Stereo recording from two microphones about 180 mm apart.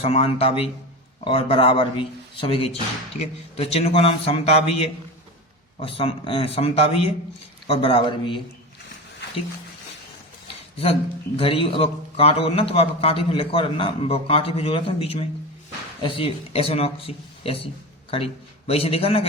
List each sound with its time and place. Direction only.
0.0 s a man's voice: 35° left (ahead or behind)
11.3 s a man's voice: 30° left (ahead or behind)
18.7 s a man's voice: 35° left (ahead or behind)